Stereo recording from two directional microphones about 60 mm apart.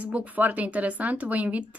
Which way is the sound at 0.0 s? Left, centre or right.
Right.